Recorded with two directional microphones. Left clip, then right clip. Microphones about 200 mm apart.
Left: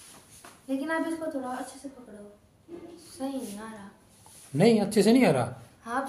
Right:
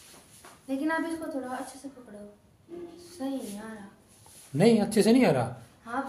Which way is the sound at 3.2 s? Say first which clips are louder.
Even; 20° left (ahead or behind).